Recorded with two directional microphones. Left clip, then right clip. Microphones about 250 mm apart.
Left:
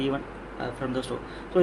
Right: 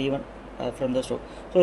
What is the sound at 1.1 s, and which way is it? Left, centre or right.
Speech, right.